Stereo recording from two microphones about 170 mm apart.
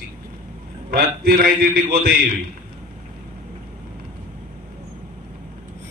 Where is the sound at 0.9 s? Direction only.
65° right (ahead or behind).